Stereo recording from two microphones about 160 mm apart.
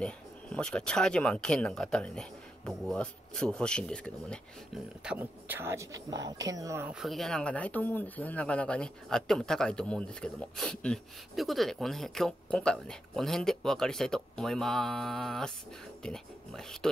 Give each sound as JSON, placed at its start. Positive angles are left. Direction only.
{"t": 0.0, "sound": "speech", "side_deg": 5}
{"t": 5.0, "sound": "speech", "side_deg": -10}
{"t": 6.9, "sound": "speech", "side_deg": 0}